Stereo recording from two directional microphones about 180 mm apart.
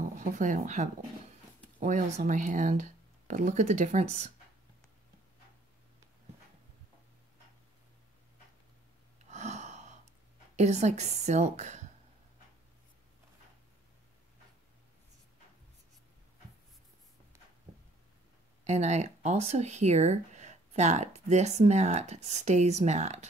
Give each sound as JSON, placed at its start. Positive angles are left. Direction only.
{"t": 0.0, "sound": "speech", "side_deg": -45}
{"t": 9.3, "sound": "gasp", "side_deg": -40}
{"t": 10.5, "sound": "speech", "side_deg": -40}
{"t": 18.6, "sound": "speech", "side_deg": -40}